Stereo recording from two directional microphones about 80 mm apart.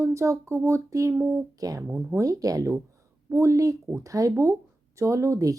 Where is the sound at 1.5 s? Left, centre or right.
Right.